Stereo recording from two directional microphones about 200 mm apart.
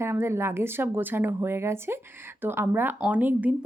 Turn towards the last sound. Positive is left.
turn(degrees=-10)  # may be behind; listen again after turning